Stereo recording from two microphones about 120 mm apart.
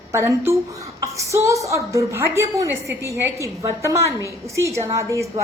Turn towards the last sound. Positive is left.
turn(degrees=-25)  # may be behind; listen again after turning